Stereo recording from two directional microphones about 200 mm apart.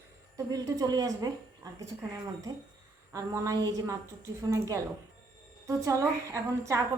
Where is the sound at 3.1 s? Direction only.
15° right (ahead or behind).